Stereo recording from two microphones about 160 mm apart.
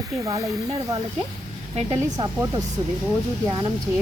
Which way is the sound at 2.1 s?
25° right (ahead or behind).